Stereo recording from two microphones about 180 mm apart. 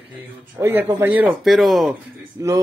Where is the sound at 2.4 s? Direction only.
20° right (ahead or behind).